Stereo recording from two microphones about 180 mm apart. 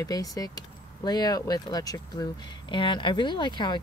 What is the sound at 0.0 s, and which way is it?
Speech, 20° left (ahead or behind).